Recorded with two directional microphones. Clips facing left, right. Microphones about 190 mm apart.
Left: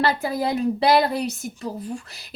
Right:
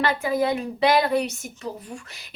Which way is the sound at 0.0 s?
35° left (ahead or behind).